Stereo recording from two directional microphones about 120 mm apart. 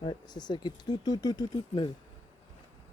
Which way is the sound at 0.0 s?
40° left (ahead or behind).